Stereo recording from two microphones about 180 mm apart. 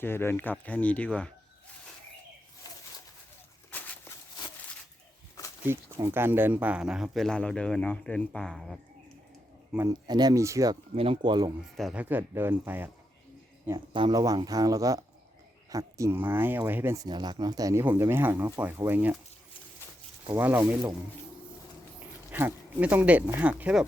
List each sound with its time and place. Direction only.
0.0 s speech: 10° left (ahead or behind)
3.7 s a sound: 10° left (ahead or behind)
5.6 s speech: 15° right (ahead or behind)
9.7 s speech: 20° right (ahead or behind)
10.9 s speech: 30° right (ahead or behind)
11.8 s speech: centre (ahead or behind)
12.0 s speech: 10° right (ahead or behind)
13.7 s speech: 25° right (ahead or behind)
20.4 s speech: 10° right (ahead or behind)
22.3 s speech: 10° right (ahead or behind)